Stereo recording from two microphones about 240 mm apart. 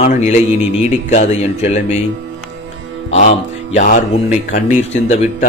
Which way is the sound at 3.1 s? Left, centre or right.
Left.